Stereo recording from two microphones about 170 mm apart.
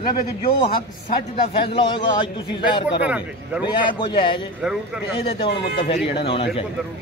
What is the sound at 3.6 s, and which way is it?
A man's voice, 30° left (ahead or behind).